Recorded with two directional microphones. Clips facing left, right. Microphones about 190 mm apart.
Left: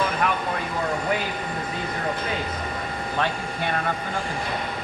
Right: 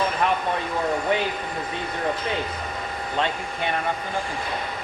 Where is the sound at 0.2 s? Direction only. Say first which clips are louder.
Right 3 dB; 30° right (ahead or behind).